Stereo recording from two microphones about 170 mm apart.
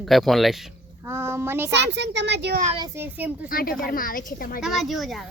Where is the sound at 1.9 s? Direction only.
90° right.